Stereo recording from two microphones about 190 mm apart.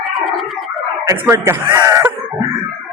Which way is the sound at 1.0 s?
15° right (ahead or behind).